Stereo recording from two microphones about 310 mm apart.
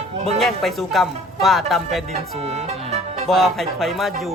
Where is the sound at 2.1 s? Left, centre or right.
Right.